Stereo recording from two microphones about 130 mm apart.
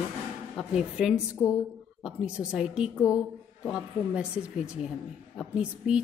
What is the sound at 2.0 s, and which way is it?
Speech, 5° right (ahead or behind).